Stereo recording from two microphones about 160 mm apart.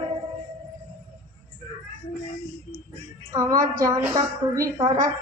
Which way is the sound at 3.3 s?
20° right (ahead or behind).